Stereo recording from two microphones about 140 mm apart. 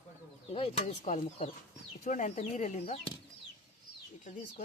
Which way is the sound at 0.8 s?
55° left (ahead or behind).